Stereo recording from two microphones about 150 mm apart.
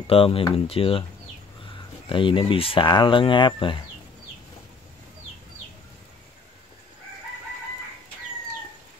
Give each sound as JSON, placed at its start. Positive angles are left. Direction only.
{"t": 0.0, "sound": "speech", "side_deg": 40}
{"t": 2.0, "sound": "speech", "side_deg": 35}